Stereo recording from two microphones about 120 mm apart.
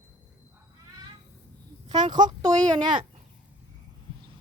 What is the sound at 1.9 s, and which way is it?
Speech, 85° right.